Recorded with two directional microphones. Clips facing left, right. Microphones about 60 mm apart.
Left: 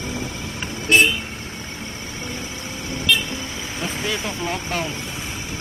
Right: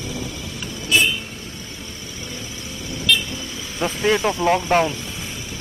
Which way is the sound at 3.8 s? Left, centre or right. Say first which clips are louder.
Right 8 dB; right.